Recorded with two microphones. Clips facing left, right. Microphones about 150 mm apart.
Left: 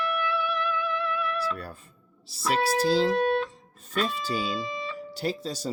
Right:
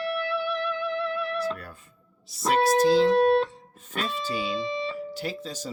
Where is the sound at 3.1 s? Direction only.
35° right (ahead or behind).